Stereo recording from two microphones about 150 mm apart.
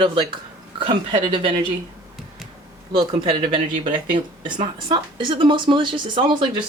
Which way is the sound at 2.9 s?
35° right (ahead or behind).